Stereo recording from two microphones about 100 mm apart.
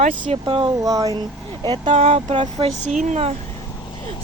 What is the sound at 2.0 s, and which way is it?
Speech, 65° right (ahead or behind).